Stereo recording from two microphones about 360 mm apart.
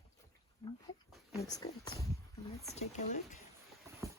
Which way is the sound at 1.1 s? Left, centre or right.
Centre.